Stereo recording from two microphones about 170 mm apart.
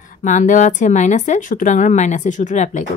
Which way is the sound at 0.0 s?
50° left (ahead or behind).